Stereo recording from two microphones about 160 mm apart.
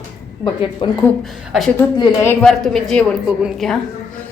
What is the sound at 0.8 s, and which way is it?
Speech, 35° left (ahead or behind).